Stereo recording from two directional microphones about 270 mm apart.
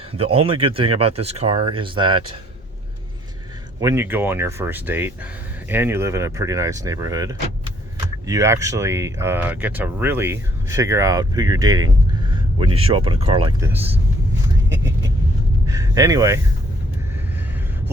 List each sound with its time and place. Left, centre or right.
0.1 s speech: right
3.8 s speech: centre
13.7 s speech: centre
15.6 s speech: centre